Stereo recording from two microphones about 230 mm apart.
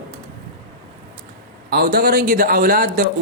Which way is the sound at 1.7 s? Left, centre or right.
Right.